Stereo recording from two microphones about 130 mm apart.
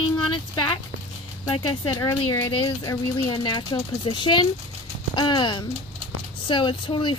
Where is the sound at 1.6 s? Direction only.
30° left (ahead or behind).